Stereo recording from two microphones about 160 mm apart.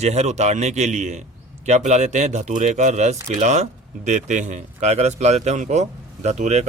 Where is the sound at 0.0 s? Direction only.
45° right (ahead or behind).